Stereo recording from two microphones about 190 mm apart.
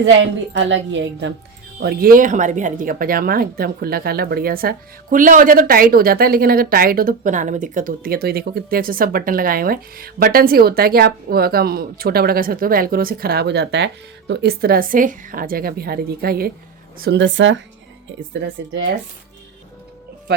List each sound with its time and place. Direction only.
0.0 s a woman's voice: 70° right (ahead or behind)
1.8 s speech: 55° right (ahead or behind)
17.0 s a woman's voice: 65° right (ahead or behind)